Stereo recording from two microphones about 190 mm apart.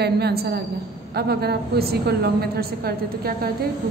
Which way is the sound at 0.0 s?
60° right (ahead or behind).